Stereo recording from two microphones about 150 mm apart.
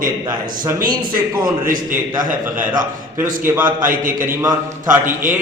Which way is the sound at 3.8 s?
65° right (ahead or behind).